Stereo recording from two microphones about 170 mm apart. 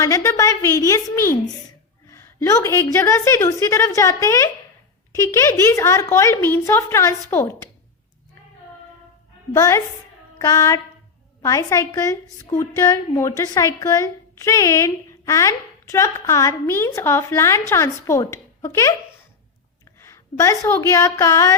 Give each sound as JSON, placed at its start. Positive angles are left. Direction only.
{"t": 0.0, "sound": "a woman's voice", "side_deg": 20}
{"t": 9.5, "sound": "a woman's voice", "side_deg": 20}
{"t": 10.3, "sound": "child singing", "side_deg": 20}
{"t": 11.4, "sound": "a woman's voice", "side_deg": 20}
{"t": 20.0, "sound": "a woman's voice", "side_deg": 20}